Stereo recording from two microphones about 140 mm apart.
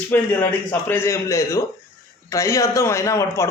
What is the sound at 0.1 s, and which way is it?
A man's voice, 15° left (ahead or behind).